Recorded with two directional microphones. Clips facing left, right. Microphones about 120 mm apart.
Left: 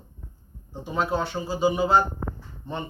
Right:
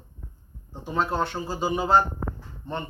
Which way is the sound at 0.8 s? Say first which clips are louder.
Even; 5° left (ahead or behind).